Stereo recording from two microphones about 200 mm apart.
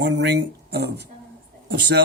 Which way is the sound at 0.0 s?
55° right (ahead or behind).